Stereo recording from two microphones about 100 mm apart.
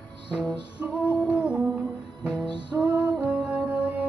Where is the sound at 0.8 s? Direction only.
10° right (ahead or behind).